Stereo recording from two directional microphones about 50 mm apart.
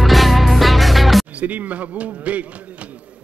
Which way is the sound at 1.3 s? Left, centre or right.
Right.